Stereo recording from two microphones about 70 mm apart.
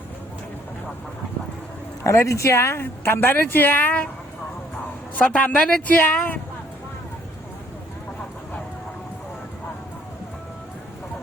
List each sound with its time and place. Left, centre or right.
2.0 s a woman's voice: left
5.1 s a man's voice: left
6.0 s a man's voice: left